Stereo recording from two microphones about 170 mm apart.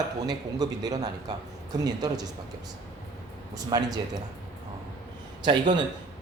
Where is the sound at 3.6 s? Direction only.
20° right (ahead or behind).